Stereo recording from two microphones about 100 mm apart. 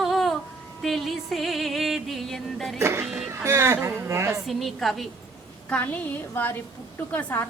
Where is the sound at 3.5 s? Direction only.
25° right (ahead or behind).